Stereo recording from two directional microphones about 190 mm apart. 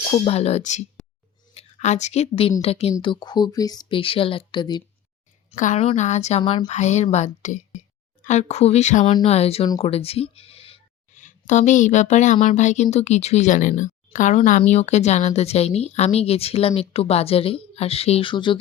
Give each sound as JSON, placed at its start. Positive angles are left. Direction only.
{"t": 0.1, "sound": "a woman's voice", "side_deg": 35}
{"t": 5.5, "sound": "speech", "side_deg": 40}
{"t": 6.7, "sound": "speech", "side_deg": 40}
{"t": 9.6, "sound": "a woman's voice", "side_deg": 20}
{"t": 9.9, "sound": "speech", "side_deg": 30}